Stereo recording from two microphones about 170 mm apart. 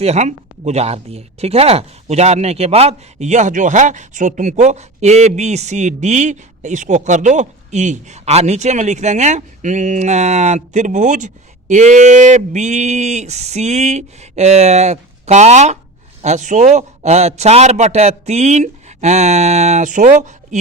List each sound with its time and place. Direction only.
0.0 s a man's voice: 40° right (ahead or behind)